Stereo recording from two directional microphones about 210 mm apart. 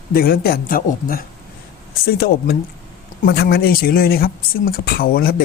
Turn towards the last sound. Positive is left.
turn(degrees=45)  # may be behind; listen again after turning